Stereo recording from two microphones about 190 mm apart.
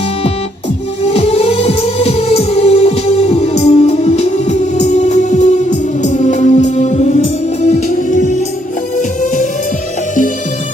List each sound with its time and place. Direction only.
1.1 s music: 30° left (ahead or behind)